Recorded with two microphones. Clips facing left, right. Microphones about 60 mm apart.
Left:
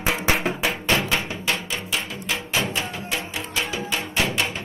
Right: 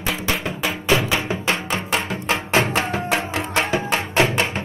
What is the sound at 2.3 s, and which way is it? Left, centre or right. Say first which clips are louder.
Music: right 6 dB; right.